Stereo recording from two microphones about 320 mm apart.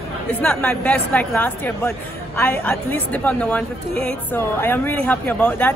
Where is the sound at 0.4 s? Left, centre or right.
Centre.